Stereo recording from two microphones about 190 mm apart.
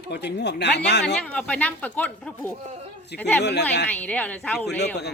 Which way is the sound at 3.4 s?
65° left (ahead or behind).